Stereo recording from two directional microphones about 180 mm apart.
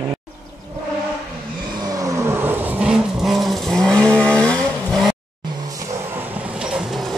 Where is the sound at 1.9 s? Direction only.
20° right (ahead or behind); by 5.1 s 5° left (ahead or behind).